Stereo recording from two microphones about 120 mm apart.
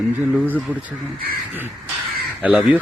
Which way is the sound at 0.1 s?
15° right (ahead or behind).